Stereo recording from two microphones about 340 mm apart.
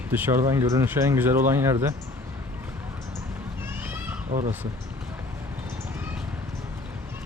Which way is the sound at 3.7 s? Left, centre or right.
Centre.